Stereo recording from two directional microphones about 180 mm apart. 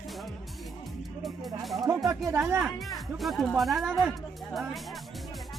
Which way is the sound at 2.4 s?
5° right (ahead or behind).